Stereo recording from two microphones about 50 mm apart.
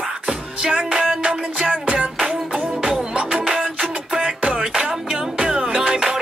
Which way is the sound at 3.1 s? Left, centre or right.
Right.